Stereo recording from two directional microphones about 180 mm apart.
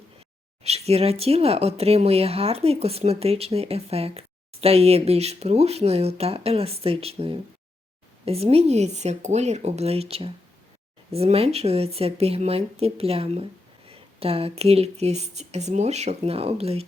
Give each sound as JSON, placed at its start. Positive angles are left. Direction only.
{"t": 0.6, "sound": "speech", "side_deg": -35}